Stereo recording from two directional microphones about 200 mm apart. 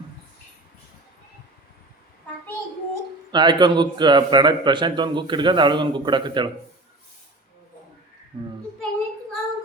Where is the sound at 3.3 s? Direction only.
20° right (ahead or behind).